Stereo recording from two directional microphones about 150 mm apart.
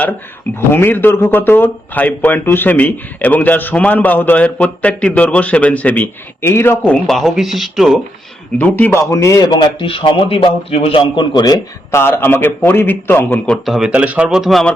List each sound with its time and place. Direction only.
0.7 s a man's voice: 15° left (ahead or behind); by 8.0 s centre (ahead or behind)
8.5 s a man's voice: 10° left (ahead or behind)